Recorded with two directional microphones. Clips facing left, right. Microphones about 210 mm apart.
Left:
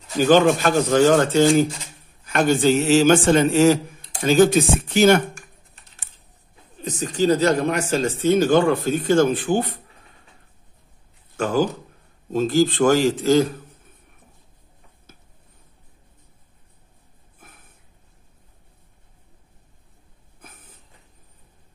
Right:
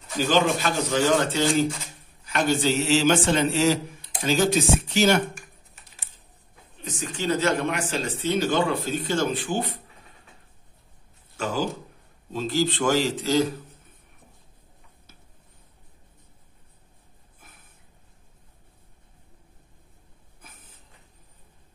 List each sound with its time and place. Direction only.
0.3 s speech: 50° left (ahead or behind)
6.8 s speech: 40° left (ahead or behind)
11.3 s speech: 50° left (ahead or behind)